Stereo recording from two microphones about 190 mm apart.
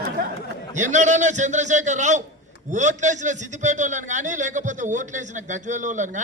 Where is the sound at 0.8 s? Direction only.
40° right (ahead or behind).